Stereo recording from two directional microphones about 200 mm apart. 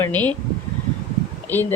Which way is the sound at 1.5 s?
10° left (ahead or behind).